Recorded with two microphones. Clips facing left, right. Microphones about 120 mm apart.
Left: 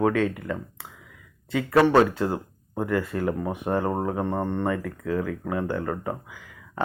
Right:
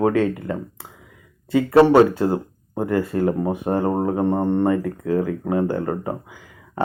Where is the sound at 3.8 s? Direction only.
20° right (ahead or behind).